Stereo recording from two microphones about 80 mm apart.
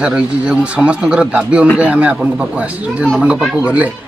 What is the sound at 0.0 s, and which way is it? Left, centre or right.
Speech, centre.